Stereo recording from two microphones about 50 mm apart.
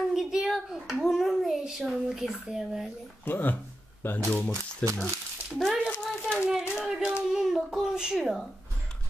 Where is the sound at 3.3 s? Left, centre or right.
Left.